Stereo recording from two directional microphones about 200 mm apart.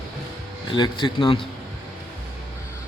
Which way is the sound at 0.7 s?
25° left (ahead or behind).